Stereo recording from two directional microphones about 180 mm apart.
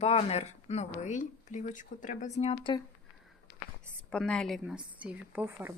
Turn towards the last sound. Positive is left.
turn(degrees=-10)  # may be behind; listen again after turning